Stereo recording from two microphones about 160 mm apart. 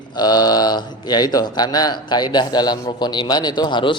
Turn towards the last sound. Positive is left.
turn(degrees=30)  # may be behind; listen again after turning